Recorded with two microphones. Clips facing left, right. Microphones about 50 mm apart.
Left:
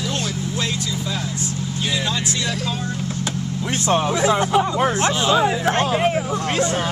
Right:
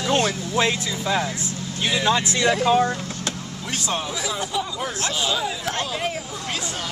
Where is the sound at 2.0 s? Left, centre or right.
Right.